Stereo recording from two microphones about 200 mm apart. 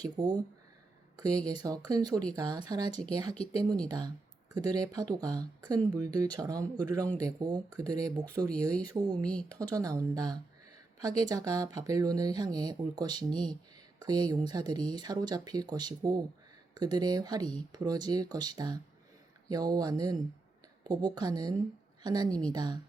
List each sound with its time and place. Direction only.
0.0 s speech: 20° right (ahead or behind)